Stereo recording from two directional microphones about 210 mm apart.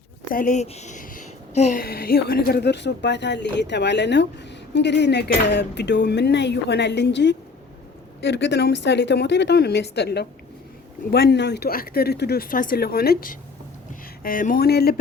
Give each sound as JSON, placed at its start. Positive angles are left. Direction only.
{"t": 0.3, "sound": "a woman's voice", "side_deg": 40}